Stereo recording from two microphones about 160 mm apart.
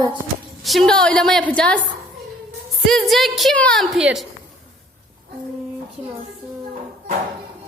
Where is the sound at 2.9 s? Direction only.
Centre (ahead or behind).